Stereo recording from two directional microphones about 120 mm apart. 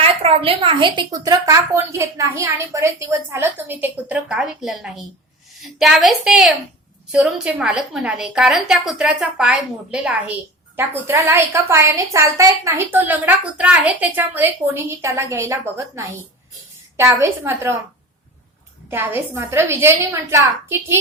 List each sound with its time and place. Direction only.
0.0 s a woman's voice: 55° right (ahead or behind); by 10.3 s 5° right (ahead or behind)
10.8 s a woman's voice: 20° right (ahead or behind)
18.9 s a woman's voice: 20° right (ahead or behind)